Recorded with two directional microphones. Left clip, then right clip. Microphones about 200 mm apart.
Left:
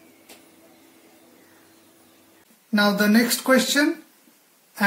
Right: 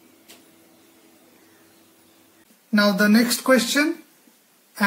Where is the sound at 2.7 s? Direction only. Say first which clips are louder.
Right 1 dB; 20° right (ahead or behind).